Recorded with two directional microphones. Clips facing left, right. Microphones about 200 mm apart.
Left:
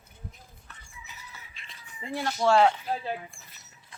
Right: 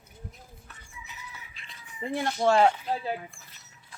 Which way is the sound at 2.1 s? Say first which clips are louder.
Even; 20° right (ahead or behind).